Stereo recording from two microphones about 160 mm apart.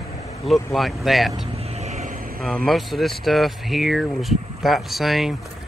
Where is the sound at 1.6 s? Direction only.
40° right (ahead or behind).